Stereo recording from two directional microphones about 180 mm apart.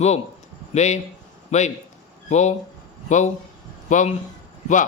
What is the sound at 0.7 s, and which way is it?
A man's voice, 40° left (ahead or behind).